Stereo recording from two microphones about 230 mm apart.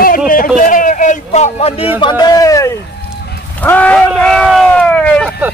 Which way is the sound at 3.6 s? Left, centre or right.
Centre.